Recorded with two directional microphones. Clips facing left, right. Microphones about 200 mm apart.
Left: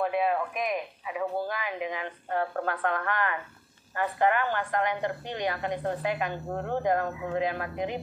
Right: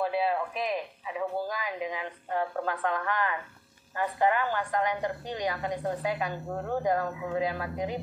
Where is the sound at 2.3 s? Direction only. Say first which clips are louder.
Left 1 dB; 15° right (ahead or behind).